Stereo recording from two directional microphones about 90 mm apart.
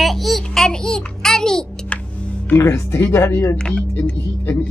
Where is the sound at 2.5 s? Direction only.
30° left (ahead or behind).